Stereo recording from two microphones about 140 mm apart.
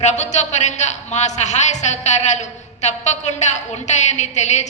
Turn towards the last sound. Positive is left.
turn(degrees=55)  # may be behind; listen again after turning